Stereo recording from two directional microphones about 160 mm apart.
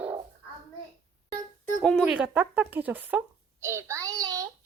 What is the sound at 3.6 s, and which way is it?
Child singing, 15° right (ahead or behind).